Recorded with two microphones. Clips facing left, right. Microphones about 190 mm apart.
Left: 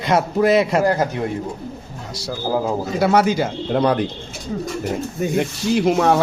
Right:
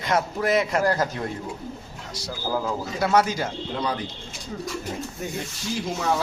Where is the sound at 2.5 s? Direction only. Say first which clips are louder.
Left 6 dB; 40° left (ahead or behind).